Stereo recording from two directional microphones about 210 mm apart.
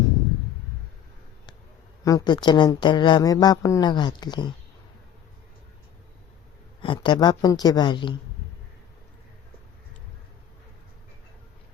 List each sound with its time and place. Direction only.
2.0 s a woman's voice: 20° left (ahead or behind)
6.8 s a woman's voice: 20° left (ahead or behind)